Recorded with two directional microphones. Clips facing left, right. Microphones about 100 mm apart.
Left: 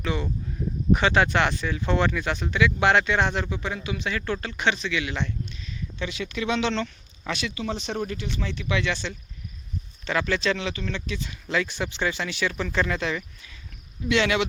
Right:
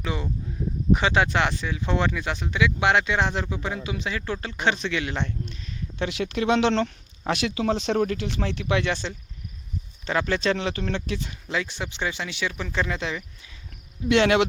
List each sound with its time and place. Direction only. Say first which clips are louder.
0.9 s speech: left 1 dB; 15° right (ahead or behind)
3.5 s speech: even; 25° right (ahead or behind); by 5.2 s 45° right (ahead or behind)
6.0 s speech: right 4 dB; 70° right (ahead or behind); by 9.1 s 40° right (ahead or behind)
10.1 s speech: right 1 dB; 30° right (ahead or behind)
10.8 s speech: right 3 dB; 55° right (ahead or behind)
11.4 s speech: left 4 dB; 15° right (ahead or behind)
14.1 s speech: right 4 dB; 50° right (ahead or behind)